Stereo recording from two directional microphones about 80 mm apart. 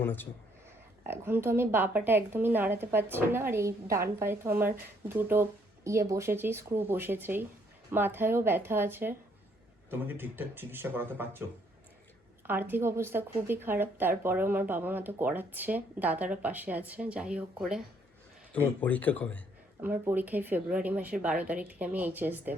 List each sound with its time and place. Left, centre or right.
0.0 s speech: left
1.0 s a woman's voice: right
12.5 s a woman's voice: right; by 17.8 s centre
18.5 s speech: centre
19.8 s a woman's voice: right